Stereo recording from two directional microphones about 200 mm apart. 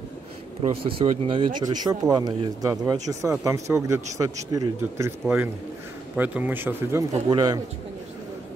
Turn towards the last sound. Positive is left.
turn(degrees=-20)  # may be behind; listen again after turning